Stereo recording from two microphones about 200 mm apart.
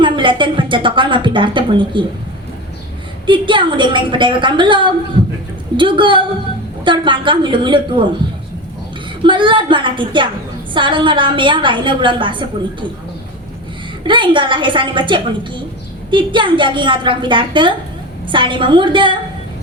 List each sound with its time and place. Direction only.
0.0 s a sound: 25° right (ahead or behind)
3.2 s a woman's voice: 25° right (ahead or behind)
9.2 s a woman's voice: 25° right (ahead or behind)
14.0 s a woman's voice: 25° right (ahead or behind)